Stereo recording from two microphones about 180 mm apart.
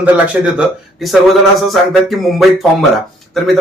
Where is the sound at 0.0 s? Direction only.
10° right (ahead or behind).